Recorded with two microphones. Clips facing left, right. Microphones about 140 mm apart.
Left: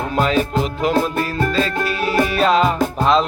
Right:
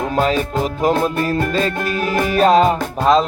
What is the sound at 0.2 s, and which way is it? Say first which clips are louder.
Music: left 1 dB; 40° right (ahead or behind).